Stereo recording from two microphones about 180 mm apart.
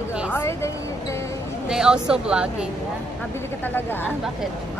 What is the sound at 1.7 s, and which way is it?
Speech, 5° right (ahead or behind).